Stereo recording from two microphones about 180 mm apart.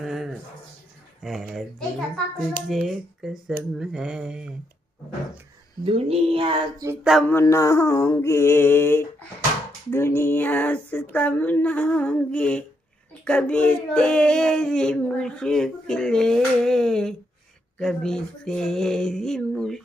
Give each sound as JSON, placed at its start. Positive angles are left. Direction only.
{"t": 0.0, "sound": "a sound", "side_deg": 0}
{"t": 1.2, "sound": "speech", "side_deg": 0}
{"t": 5.8, "sound": "a sound", "side_deg": -30}
{"t": 7.0, "sound": "speech", "side_deg": 0}
{"t": 7.3, "sound": "music", "side_deg": 15}
{"t": 13.2, "sound": "speech", "side_deg": 5}